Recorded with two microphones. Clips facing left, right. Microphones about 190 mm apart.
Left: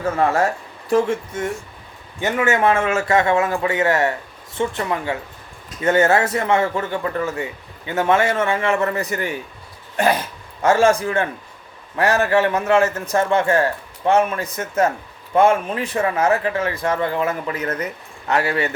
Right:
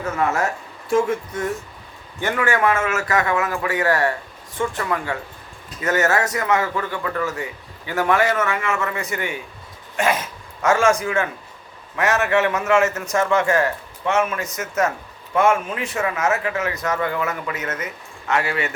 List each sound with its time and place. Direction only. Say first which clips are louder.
0.0 s a man's voice: left 3 dB; 30° left (ahead or behind)